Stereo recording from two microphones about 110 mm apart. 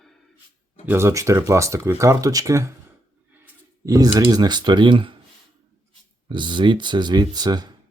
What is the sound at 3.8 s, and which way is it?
Speech, 35° right (ahead or behind).